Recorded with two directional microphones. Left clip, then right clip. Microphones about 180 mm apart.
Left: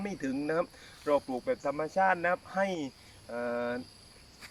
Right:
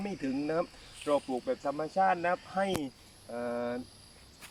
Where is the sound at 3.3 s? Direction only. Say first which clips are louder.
Left 1 dB; centre (ahead or behind).